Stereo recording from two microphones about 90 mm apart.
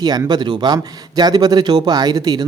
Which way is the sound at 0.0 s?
50° right (ahead or behind).